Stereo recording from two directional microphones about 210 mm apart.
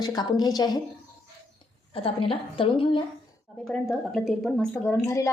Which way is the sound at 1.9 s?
25° left (ahead or behind).